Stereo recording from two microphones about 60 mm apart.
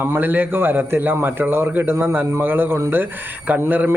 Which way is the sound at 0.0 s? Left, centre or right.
Right.